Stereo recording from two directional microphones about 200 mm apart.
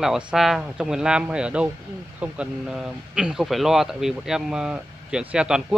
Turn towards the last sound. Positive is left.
turn(degrees=-5)  # may be behind; listen again after turning